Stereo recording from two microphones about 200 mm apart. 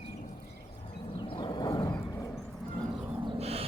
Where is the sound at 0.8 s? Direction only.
25° left (ahead or behind).